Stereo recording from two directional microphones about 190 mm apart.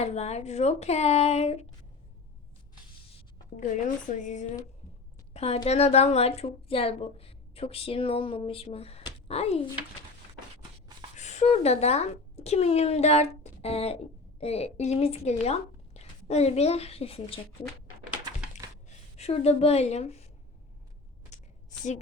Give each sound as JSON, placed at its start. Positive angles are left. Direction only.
{"t": 0.0, "sound": "a woman's voice", "side_deg": 35}
{"t": 3.2, "sound": "speech", "side_deg": 40}
{"t": 5.3, "sound": "a sound", "side_deg": 35}
{"t": 5.6, "sound": "a woman's voice", "side_deg": 35}
{"t": 11.2, "sound": "speech", "side_deg": 35}
{"t": 19.1, "sound": "a woman's voice", "side_deg": 35}
{"t": 21.3, "sound": "a sound", "side_deg": 35}